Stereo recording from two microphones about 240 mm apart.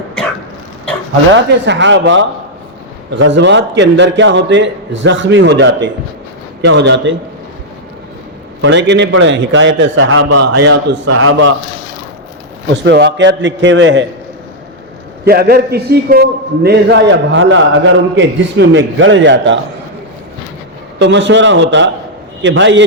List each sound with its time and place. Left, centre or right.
1.3 s a man's voice: right
8.6 s a man's voice: right
10.8 s a man's voice: right
12.7 s a man's voice: right
15.2 s a man's voice: right
21.0 s a man's voice: right